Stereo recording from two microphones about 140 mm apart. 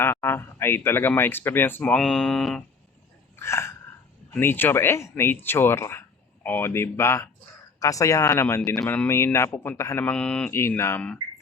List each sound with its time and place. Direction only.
0.0 s speech: 15° left (ahead or behind)
3.3 s a sound: 20° left (ahead or behind)
4.4 s speech: 15° left (ahead or behind)
10.5 s speech: 20° left (ahead or behind)